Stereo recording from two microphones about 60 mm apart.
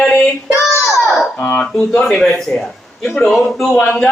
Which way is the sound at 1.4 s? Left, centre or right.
Centre.